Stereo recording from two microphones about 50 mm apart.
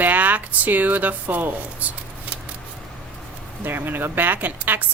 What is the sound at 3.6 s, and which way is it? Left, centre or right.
Speech, right.